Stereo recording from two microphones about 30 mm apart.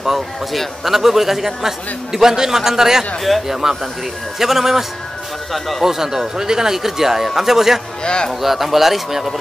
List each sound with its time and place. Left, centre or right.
0.5 s a man's voice: centre
5.5 s speech: centre
5.9 s a man's voice: centre
8.0 s speech: left
8.3 s speech: centre